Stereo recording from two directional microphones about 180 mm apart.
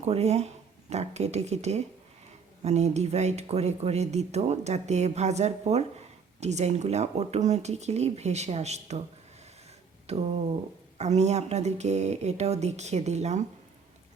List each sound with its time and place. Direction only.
0.0 s speech: 35° right (ahead or behind)
10.1 s speech: 35° right (ahead or behind)